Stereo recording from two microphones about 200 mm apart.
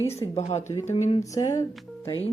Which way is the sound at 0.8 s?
35° left (ahead or behind).